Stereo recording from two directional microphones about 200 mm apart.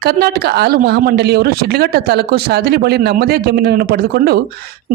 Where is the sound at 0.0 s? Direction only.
55° right (ahead or behind).